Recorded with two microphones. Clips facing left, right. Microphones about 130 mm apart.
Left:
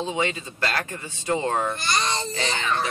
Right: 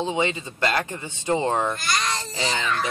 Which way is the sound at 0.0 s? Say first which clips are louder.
Right 2 dB; 25° right (ahead or behind).